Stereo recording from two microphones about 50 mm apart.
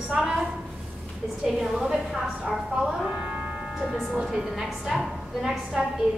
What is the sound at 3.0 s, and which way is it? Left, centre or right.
Music, centre.